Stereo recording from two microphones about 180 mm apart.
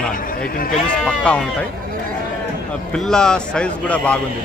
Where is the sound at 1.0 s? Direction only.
5° left (ahead or behind).